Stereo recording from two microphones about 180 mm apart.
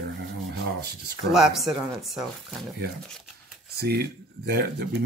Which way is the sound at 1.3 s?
Centre (ahead or behind).